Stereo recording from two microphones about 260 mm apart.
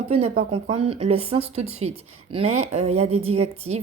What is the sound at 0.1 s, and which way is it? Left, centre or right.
Speech, right.